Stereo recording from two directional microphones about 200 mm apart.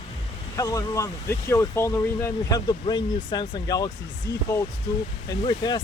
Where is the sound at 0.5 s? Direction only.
15° left (ahead or behind).